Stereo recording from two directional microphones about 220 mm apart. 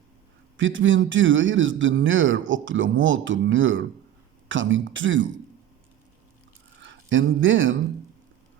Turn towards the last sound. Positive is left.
turn(degrees=-60)  # may be behind; listen again after turning